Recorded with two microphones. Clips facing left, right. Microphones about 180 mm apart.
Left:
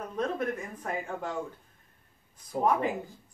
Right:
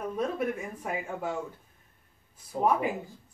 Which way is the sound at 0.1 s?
10° right (ahead or behind).